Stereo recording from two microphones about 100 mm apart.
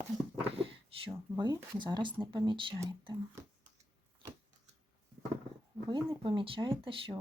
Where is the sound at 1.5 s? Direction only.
50° right (ahead or behind).